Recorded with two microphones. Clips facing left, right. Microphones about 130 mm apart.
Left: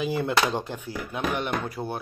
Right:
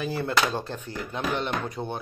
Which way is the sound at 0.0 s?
15° left (ahead or behind).